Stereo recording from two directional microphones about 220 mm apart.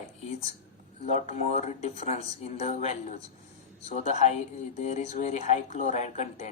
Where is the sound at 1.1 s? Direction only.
30° left (ahead or behind).